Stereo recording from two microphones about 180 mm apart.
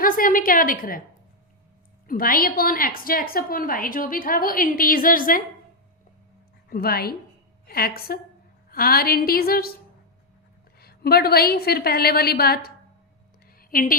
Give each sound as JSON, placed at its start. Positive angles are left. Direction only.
{"t": 0.0, "sound": "a woman's voice", "side_deg": 50}
{"t": 2.0, "sound": "a woman's voice", "side_deg": 55}
{"t": 6.7, "sound": "a woman's voice", "side_deg": 55}
{"t": 10.8, "sound": "a woman's voice", "side_deg": 60}
{"t": 13.6, "sound": "a sound", "side_deg": 50}